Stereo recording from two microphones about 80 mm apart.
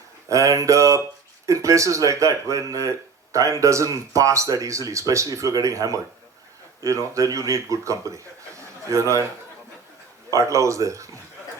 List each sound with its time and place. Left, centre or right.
0.3 s speech: right
10.3 s speech: right